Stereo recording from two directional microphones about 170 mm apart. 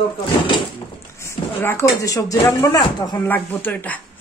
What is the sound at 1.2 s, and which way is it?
Speech, 15° left (ahead or behind).